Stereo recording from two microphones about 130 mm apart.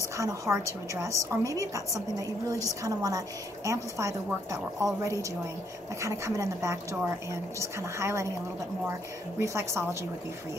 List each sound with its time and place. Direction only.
0.2 s a woman's voice: 25° right (ahead or behind)
5.9 s a woman's voice: 25° right (ahead or behind)
8.0 s a woman's voice: 20° right (ahead or behind)
9.4 s a woman's voice: 20° right (ahead or behind)